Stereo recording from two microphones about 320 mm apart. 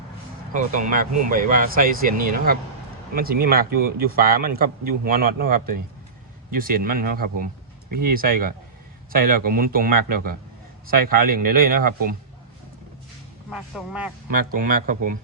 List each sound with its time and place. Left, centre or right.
0.5 s a man's voice: right
13.5 s a man's voice: centre
14.5 s a man's voice: right